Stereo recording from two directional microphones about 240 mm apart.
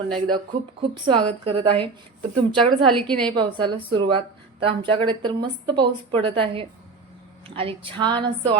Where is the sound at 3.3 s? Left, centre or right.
Centre.